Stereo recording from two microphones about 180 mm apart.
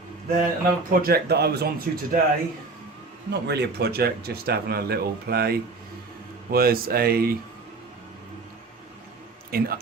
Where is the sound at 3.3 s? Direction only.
70° right (ahead or behind).